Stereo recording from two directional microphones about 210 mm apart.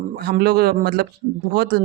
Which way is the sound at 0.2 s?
50° right (ahead or behind).